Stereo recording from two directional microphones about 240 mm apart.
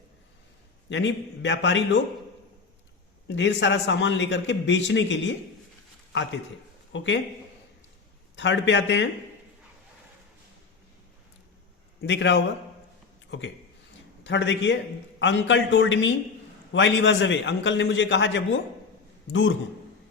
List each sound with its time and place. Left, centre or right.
0.9 s a man's voice: left
3.2 s a man's voice: left
6.9 s a man's voice: left
8.4 s a man's voice: left
11.9 s a man's voice: left
14.3 s a man's voice: left